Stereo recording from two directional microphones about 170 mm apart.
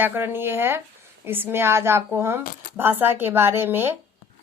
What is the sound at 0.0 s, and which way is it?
A woman's voice, 15° right (ahead or behind).